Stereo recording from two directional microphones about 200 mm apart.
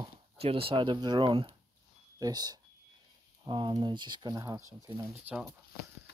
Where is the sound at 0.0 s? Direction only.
30° right (ahead or behind).